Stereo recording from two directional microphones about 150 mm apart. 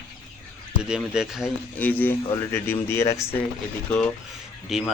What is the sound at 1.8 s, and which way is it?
Speech, 10° left (ahead or behind).